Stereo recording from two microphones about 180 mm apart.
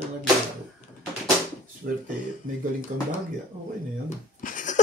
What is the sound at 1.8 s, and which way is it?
Speech, 60° right (ahead or behind).